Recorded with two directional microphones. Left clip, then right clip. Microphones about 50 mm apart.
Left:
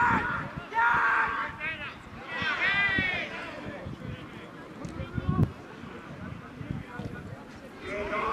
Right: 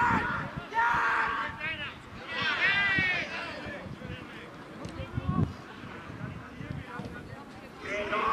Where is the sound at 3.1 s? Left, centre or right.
Centre.